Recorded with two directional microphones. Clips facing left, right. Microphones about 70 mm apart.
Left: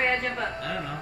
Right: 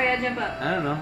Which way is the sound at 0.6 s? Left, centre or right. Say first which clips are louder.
Right 7 dB; right.